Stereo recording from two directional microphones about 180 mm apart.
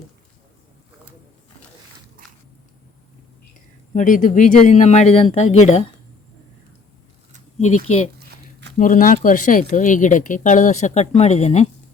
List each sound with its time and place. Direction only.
3.9 s speech: 45° left (ahead or behind)
7.9 s speech: 35° left (ahead or behind)
8.8 s speech: 50° left (ahead or behind)